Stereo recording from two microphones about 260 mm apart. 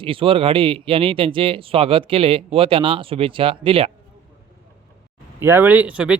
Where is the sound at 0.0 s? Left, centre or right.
Right.